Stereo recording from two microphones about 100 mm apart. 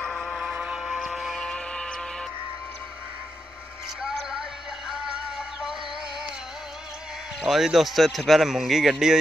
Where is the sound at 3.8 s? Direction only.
5° right (ahead or behind).